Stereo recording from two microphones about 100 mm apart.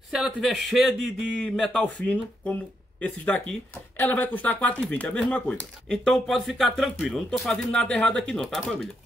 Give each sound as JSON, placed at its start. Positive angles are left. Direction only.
{"t": 0.1, "sound": "speech", "side_deg": -5}